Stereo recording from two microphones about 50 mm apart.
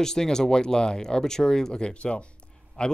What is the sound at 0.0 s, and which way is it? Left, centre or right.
A man's voice, centre.